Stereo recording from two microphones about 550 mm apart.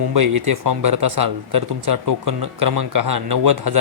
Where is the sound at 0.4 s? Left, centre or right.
Right.